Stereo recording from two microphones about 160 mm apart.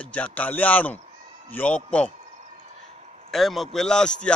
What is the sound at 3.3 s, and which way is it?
Speech, centre (ahead or behind).